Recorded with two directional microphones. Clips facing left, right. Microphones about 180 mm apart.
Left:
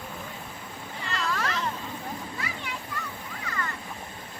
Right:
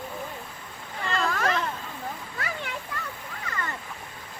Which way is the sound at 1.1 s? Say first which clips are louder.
Right 4 dB; 50° right (ahead or behind).